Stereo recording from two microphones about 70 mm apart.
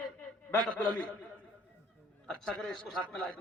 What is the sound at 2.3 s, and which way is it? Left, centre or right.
A man's voice, centre.